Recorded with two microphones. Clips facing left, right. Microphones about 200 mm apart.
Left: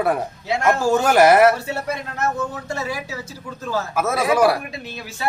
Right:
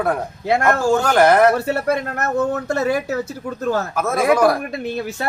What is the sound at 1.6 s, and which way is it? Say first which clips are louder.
Speech: right 7 dB; 60° right (ahead or behind).